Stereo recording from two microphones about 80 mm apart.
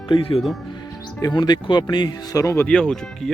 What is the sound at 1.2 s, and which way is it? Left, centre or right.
Speech, left.